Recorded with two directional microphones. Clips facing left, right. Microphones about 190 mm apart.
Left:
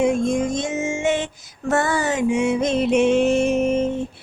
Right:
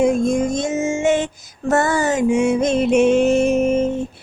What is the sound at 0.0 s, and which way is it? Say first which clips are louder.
Music: right 3 dB; 40° right (ahead or behind).